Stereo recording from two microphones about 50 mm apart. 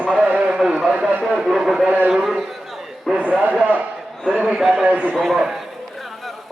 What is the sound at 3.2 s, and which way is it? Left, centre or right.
Speech, right.